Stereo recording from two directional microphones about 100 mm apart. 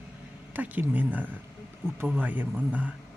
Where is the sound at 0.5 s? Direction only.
15° right (ahead or behind).